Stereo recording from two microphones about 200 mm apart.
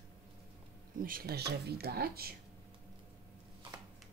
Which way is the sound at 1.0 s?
45° right (ahead or behind).